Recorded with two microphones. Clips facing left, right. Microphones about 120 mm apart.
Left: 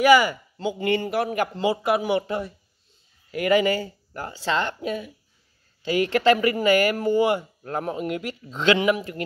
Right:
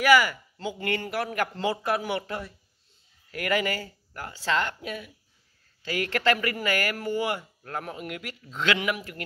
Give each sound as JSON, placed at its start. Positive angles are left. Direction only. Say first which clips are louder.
{"t": 0.0, "sound": "speech", "louder": "left 4 dB", "side_deg": 20}